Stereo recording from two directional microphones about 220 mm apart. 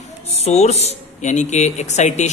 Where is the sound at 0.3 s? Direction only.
30° left (ahead or behind).